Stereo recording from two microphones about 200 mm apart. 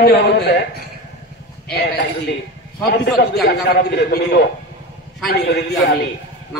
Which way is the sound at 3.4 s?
55° left (ahead or behind).